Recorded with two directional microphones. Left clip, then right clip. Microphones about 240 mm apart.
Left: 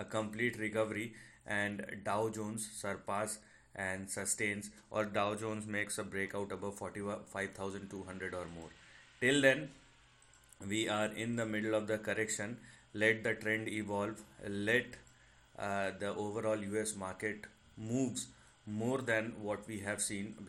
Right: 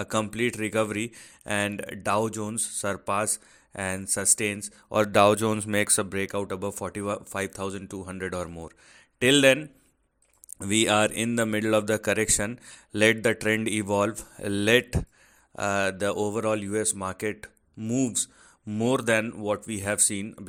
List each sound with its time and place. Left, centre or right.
0.0 s a man's voice: right
10.6 s speech: right
18.8 s speech: right